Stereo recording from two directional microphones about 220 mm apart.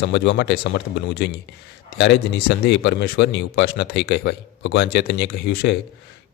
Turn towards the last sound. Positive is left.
turn(degrees=50)  # may be behind; listen again after turning